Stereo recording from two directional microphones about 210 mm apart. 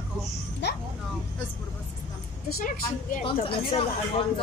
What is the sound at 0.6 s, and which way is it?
Speech, 55° left (ahead or behind).